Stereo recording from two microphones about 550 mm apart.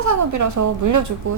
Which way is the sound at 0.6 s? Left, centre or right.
Right.